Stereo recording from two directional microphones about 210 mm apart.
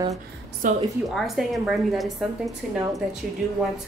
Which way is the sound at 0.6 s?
35° right (ahead or behind).